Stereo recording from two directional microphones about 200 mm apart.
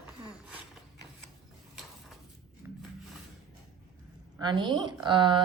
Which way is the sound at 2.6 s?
10° right (ahead or behind).